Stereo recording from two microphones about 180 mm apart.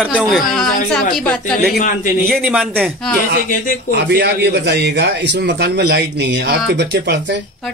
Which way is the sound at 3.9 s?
65° right (ahead or behind).